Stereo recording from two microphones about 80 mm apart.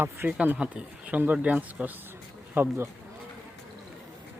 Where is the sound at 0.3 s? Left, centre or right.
Centre.